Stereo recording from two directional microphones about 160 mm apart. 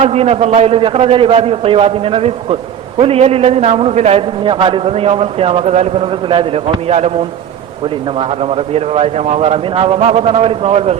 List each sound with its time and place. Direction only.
0.0 s a man's voice: 40° right (ahead or behind)